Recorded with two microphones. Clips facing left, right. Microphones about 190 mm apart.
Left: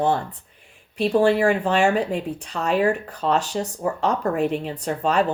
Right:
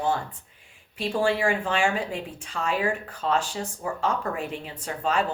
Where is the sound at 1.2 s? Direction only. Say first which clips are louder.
Left 6 dB; 40° left (ahead or behind).